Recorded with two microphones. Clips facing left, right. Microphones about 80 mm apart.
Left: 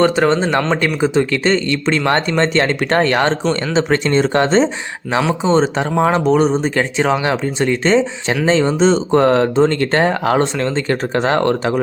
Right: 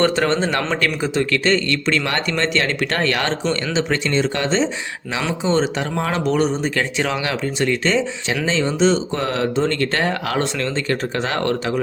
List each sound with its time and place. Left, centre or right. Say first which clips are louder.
0.0 s speech: left 4 dB; centre; by 4.7 s left
5.5 s speech: left 3 dB; left